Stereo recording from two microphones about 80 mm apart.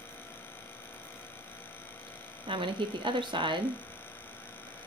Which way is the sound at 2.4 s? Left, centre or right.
Right.